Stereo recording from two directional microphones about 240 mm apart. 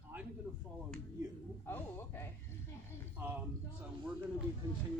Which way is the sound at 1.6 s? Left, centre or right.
Centre.